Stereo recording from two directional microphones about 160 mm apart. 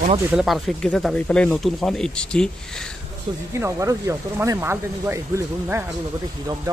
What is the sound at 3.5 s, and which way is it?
Speech, 15° right (ahead or behind).